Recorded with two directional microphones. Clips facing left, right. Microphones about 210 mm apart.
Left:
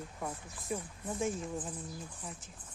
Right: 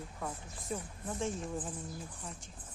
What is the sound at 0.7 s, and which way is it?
Speech, 5° left (ahead or behind).